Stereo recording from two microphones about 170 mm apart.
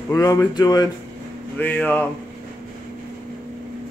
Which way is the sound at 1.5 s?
10° left (ahead or behind).